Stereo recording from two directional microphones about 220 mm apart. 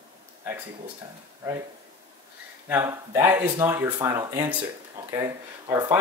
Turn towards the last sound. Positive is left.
turn(degrees=-15)  # may be behind; listen again after turning